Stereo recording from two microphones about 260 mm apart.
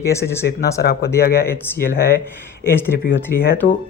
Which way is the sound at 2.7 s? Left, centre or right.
Centre.